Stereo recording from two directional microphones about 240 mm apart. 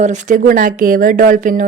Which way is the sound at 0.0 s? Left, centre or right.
Right.